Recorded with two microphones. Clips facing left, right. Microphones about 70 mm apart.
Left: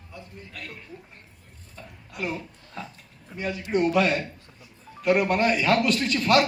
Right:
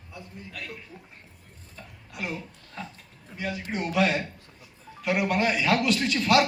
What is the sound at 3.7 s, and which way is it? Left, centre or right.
A man's voice, left.